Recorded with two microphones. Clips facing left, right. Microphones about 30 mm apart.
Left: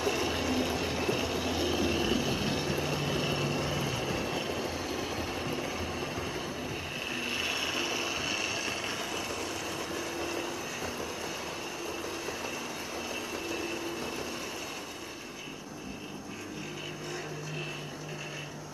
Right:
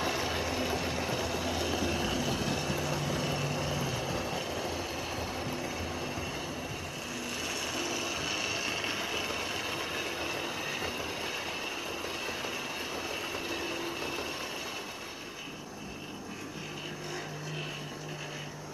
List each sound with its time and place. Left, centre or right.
0.0 s vehicle: centre
7.1 s a sound: left
8.2 s vehicle: centre; by 11.1 s right
12.3 s train: centre
13.7 s vehicle: right